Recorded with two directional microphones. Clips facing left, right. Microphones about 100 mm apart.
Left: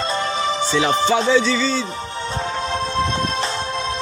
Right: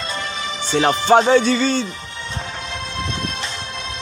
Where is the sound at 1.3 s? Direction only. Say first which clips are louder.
Right 2 dB; 55° right (ahead or behind).